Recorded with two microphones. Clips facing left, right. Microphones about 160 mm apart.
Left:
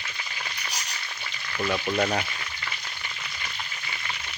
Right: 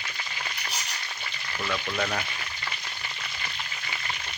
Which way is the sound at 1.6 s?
30° left (ahead or behind).